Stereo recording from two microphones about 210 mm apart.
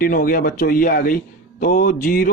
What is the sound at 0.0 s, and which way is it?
A man's voice, 40° left (ahead or behind).